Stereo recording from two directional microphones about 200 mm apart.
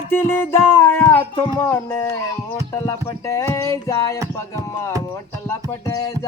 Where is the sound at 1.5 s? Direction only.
10° left (ahead or behind).